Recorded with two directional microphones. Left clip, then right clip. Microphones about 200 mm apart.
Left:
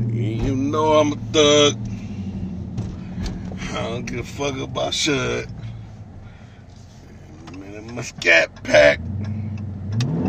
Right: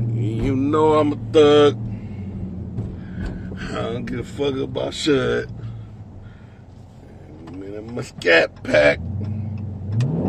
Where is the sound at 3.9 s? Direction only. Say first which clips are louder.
Even; 50° right (ahead or behind).